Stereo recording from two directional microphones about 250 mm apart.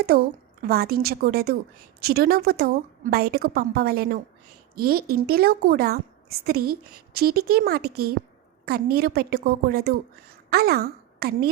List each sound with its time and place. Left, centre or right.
0.0 s a woman's voice: right